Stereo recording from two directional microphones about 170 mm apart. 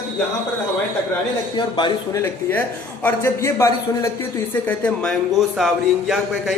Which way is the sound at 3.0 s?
10° left (ahead or behind).